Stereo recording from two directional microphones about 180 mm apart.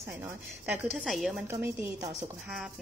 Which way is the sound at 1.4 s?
15° right (ahead or behind).